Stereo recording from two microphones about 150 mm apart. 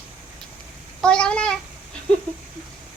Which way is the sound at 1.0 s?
5° left (ahead or behind).